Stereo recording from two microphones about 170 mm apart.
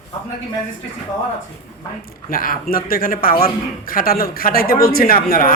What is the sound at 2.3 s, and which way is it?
A man's voice, 55° left (ahead or behind).